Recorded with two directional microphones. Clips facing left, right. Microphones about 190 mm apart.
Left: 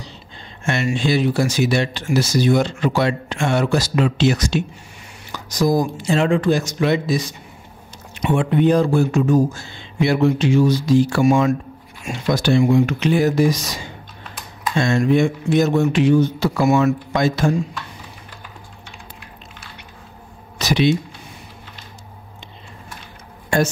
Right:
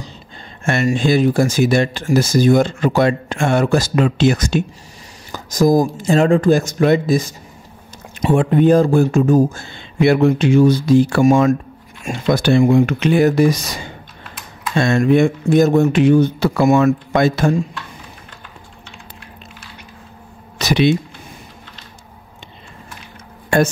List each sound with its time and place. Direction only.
0.7 s speech: 50° right (ahead or behind)
8.3 s speech: 45° right (ahead or behind); by 13.7 s 60° right (ahead or behind)
14.8 s speech: 55° right (ahead or behind)
20.5 s a sound: 60° right (ahead or behind)